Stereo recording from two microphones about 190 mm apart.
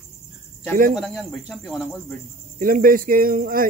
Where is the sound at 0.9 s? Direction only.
Centre (ahead or behind).